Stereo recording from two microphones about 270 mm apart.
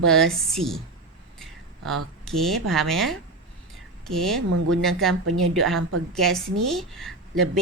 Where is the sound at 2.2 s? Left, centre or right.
Centre.